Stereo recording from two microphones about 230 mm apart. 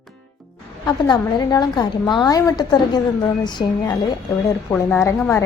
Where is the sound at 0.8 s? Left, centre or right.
Centre.